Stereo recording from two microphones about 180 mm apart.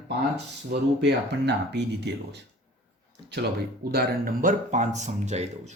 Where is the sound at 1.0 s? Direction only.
70° right (ahead or behind).